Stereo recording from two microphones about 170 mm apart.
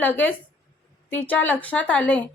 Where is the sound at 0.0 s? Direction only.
10° left (ahead or behind).